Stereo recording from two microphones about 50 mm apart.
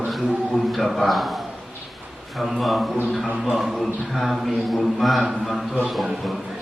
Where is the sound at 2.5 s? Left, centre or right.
Centre.